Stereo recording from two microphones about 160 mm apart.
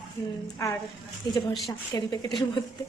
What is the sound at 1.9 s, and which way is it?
Speech, 25° left (ahead or behind).